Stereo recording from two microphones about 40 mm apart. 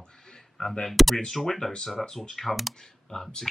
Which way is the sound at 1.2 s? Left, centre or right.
Centre.